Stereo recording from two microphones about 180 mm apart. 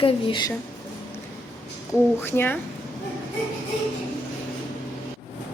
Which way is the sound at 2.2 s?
15° left (ahead or behind).